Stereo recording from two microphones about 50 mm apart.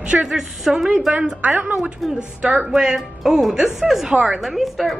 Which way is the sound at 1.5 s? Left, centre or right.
Right.